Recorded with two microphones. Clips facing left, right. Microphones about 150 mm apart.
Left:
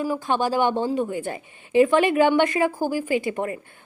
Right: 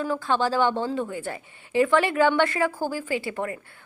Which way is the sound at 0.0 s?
15° left (ahead or behind).